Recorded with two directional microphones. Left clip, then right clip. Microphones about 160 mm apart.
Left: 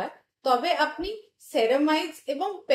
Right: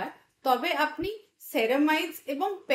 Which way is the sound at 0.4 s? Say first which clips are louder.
Left 2 dB; 40° right (ahead or behind).